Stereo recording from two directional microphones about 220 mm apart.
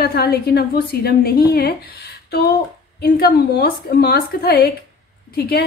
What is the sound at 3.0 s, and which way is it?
A woman's voice, 45° left (ahead or behind).